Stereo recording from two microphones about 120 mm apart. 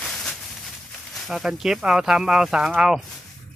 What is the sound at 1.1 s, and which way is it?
Speech, centre (ahead or behind).